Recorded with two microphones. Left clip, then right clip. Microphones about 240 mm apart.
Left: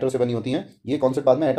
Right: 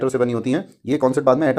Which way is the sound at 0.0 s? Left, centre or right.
Right.